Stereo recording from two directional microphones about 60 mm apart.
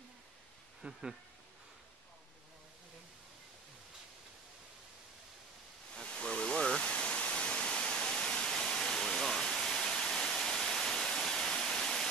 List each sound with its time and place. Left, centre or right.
0.8 s speech: centre
6.0 s waterfall: centre